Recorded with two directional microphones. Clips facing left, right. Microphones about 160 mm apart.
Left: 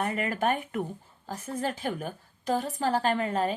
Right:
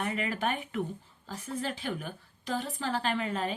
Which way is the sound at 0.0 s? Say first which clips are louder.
Left 4 dB; 45° left (ahead or behind).